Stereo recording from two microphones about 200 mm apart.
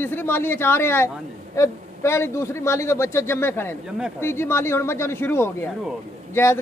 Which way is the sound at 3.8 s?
5° right (ahead or behind).